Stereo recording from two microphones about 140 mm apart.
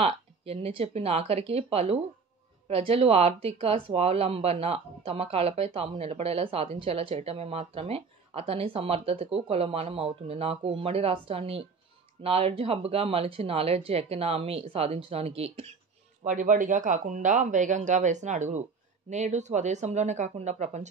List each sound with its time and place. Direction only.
0.0 s speech: 45° right (ahead or behind)
16.3 s speech: 65° right (ahead or behind)